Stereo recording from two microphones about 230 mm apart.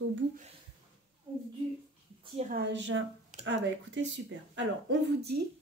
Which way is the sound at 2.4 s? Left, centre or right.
Right.